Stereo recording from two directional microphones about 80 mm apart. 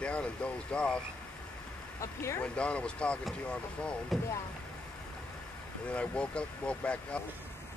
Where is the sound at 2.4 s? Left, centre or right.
Centre.